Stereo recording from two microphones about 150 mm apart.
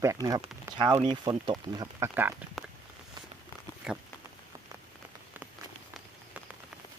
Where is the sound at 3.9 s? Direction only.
5° right (ahead or behind).